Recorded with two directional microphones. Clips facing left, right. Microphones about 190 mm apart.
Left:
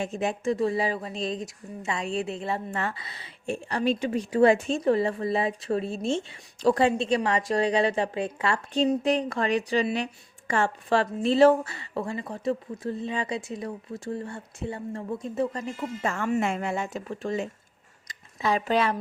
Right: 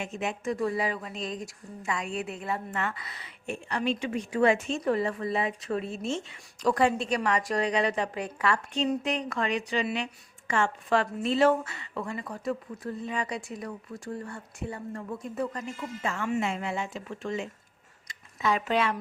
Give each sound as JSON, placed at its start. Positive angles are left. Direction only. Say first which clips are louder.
{"t": 0.0, "sound": "a woman's voice", "louder": "left 5 dB", "side_deg": 35}